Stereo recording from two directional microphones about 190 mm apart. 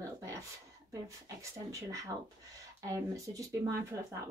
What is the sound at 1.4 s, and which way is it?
Speech, 15° right (ahead or behind).